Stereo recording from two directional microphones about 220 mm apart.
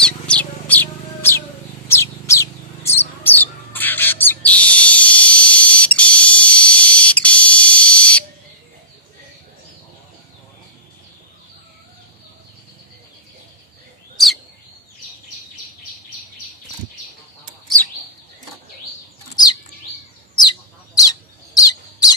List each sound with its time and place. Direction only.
0.0 s bird: 5° left (ahead or behind)
14.1 s bird vocalization: centre (ahead or behind)
21.0 s bird: 15° left (ahead or behind)